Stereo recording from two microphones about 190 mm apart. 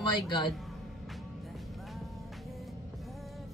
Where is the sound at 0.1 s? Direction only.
25° left (ahead or behind).